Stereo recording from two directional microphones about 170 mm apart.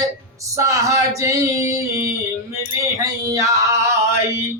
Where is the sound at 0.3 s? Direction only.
20° right (ahead or behind).